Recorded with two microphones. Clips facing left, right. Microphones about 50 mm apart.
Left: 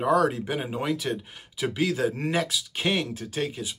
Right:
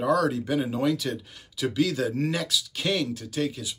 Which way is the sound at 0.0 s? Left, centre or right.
Left.